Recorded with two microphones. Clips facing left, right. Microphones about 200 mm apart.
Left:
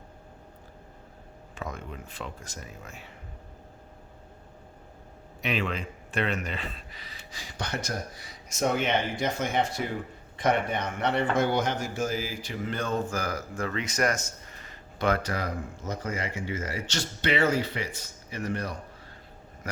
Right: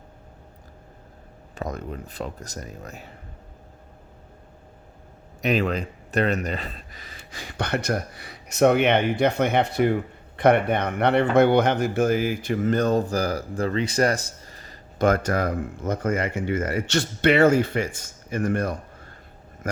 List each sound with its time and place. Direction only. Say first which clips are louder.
1.5 s speech: right 6 dB; 40° right (ahead or behind)
5.4 s a man's voice: right 7 dB; 40° right (ahead or behind)